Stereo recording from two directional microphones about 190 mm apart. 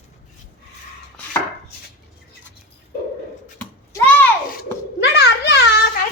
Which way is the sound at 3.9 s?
10° left (ahead or behind).